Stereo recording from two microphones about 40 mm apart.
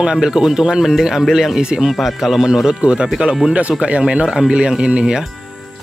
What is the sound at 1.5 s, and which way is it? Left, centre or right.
Speech, centre.